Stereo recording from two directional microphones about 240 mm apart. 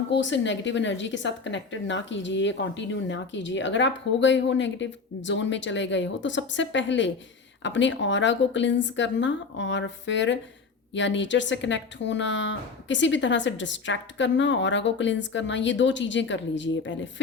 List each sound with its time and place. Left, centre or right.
0.1 s a woman's voice: left